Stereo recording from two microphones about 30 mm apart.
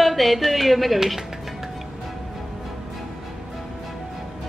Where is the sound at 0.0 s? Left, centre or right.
Centre.